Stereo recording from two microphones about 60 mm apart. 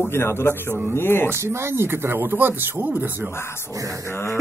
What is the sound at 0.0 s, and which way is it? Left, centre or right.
Speech, left.